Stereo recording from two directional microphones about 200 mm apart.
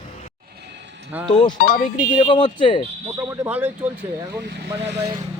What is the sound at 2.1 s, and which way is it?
Speech, 25° left (ahead or behind).